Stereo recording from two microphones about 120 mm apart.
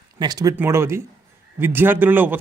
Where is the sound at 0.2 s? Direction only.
35° right (ahead or behind).